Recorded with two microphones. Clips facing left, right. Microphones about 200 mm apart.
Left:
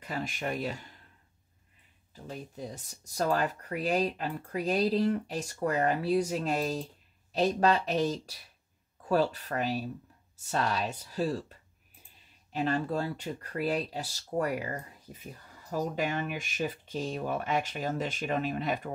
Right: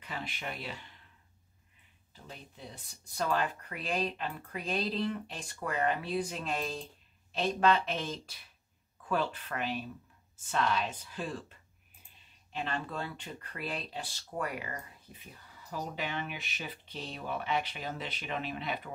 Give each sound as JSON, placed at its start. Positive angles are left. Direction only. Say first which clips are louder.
{"t": 0.0, "sound": "speech", "louder": "left 6 dB", "side_deg": 45}
{"t": 2.1, "sound": "speech", "louder": "left 9 dB", "side_deg": 40}
{"t": 12.5, "sound": "speech", "louder": "left 7 dB", "side_deg": 40}